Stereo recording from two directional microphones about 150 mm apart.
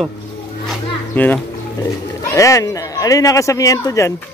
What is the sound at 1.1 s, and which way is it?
A child's voice, 10° left (ahead or behind).